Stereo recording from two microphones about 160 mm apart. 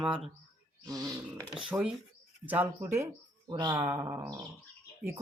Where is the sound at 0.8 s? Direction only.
20° right (ahead or behind).